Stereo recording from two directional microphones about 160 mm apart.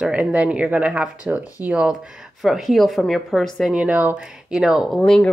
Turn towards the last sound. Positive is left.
turn(degrees=5)  # may be behind; listen again after turning